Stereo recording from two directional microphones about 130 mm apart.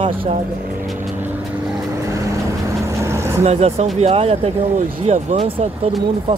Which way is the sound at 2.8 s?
20° right (ahead or behind).